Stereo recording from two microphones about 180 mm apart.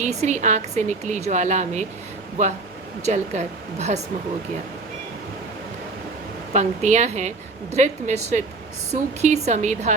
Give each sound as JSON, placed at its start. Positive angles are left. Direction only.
{"t": 0.0, "sound": "a woman's voice", "side_deg": -40}
{"t": 3.1, "sound": "a woman's voice", "side_deg": -40}
{"t": 6.5, "sound": "a woman's voice", "side_deg": -40}